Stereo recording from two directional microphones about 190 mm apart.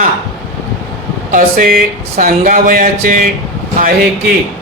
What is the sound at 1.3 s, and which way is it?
Speech, 45° right (ahead or behind).